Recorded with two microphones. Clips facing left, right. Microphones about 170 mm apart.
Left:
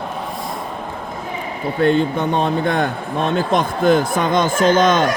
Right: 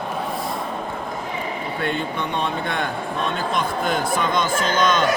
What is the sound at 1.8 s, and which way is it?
A man's voice, 45° left (ahead or behind).